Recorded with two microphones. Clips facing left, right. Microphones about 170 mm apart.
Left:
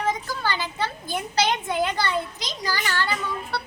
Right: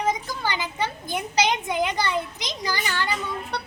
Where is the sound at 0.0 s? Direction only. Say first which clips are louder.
Even; 15° right (ahead or behind).